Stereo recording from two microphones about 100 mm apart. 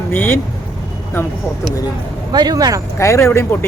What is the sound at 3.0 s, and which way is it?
Speech, 30° left (ahead or behind).